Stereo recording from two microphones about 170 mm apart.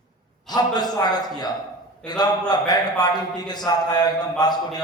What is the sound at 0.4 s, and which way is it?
A man's voice, 25° left (ahead or behind).